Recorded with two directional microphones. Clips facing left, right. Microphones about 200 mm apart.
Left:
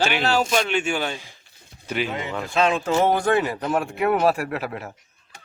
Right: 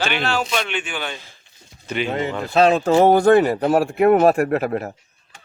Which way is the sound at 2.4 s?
40° right (ahead or behind).